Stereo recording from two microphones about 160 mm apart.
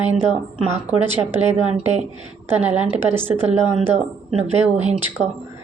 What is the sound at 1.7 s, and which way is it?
Speech, 45° right (ahead or behind).